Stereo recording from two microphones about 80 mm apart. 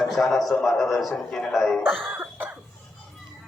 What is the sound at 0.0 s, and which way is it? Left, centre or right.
A man's voice, centre.